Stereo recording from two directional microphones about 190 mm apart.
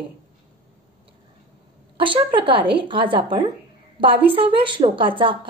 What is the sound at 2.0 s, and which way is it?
A woman's voice, 25° right (ahead or behind).